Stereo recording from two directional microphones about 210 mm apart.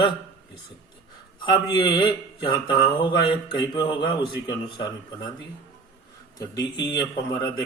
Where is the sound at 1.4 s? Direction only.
20° left (ahead or behind).